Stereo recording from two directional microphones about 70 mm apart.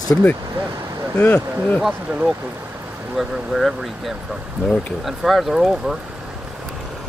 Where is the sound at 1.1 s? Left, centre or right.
Left.